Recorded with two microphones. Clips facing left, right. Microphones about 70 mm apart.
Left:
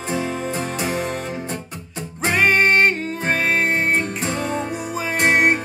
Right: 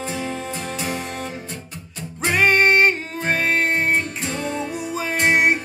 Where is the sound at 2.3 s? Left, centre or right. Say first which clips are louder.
Even; centre.